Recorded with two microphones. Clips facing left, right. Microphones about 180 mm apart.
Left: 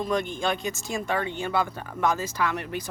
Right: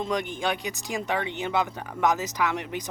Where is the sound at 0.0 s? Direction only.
15° right (ahead or behind).